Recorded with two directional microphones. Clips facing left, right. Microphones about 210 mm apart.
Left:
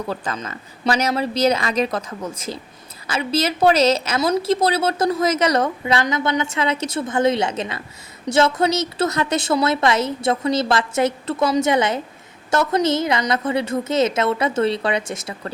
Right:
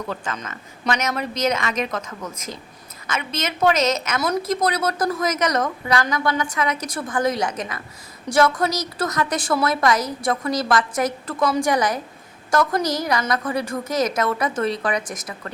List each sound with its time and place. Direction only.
0.1 s a woman's voice: 35° left (ahead or behind)